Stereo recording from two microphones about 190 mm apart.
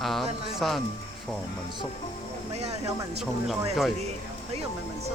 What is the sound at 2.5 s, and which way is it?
Speech, 35° right (ahead or behind).